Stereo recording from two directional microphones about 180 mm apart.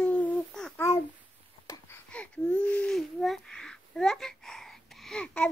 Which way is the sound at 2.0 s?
5° left (ahead or behind).